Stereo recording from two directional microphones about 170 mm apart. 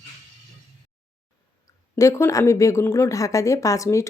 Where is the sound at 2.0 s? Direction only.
20° left (ahead or behind).